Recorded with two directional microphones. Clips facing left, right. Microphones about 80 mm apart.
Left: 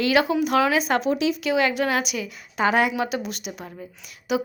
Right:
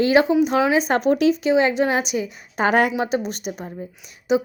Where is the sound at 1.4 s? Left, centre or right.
Right.